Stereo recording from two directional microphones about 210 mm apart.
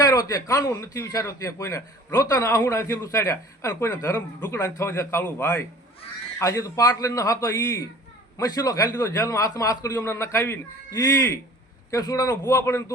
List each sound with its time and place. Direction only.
0.0 s speech: 15° left (ahead or behind)